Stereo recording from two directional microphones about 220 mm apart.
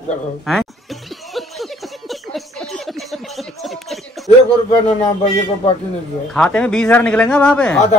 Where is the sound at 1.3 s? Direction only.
Centre (ahead or behind).